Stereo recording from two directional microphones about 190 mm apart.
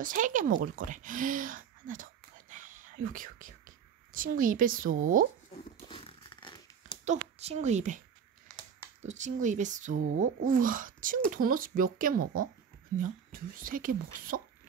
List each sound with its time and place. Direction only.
0.0 s speech: 45° right (ahead or behind)
2.5 s whispering: 45° right (ahead or behind)
5.9 s zipper: 25° left (ahead or behind)
7.1 s a woman's voice: 35° right (ahead or behind)
9.0 s a woman's voice: 40° right (ahead or behind)